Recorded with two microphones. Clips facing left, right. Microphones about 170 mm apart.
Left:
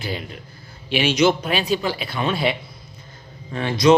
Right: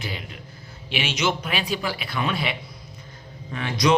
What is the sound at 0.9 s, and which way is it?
A man's voice, 35° left (ahead or behind).